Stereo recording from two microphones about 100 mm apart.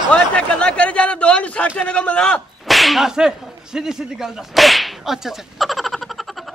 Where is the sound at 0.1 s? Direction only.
10° left (ahead or behind).